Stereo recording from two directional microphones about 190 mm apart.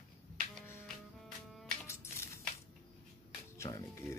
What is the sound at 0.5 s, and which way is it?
Music, 10° left (ahead or behind).